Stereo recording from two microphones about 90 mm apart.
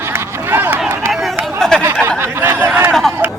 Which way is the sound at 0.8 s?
30° right (ahead or behind).